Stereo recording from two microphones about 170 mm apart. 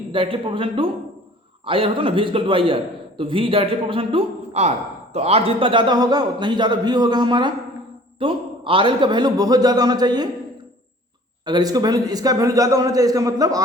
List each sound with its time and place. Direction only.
0.1 s a man's voice: 30° right (ahead or behind)
11.4 s a man's voice: 25° right (ahead or behind)